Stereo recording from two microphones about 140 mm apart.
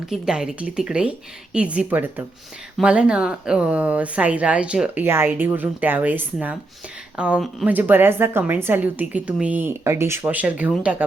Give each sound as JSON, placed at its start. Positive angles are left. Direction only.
{"t": 0.1, "sound": "speech", "side_deg": -5}